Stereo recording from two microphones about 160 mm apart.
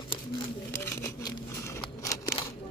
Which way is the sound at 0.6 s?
15° left (ahead or behind).